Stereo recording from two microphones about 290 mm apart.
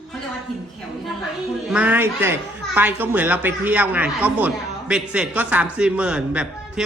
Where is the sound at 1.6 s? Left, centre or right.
Centre.